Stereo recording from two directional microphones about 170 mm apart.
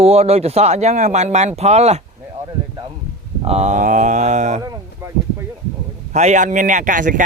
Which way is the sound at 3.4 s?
40° right (ahead or behind).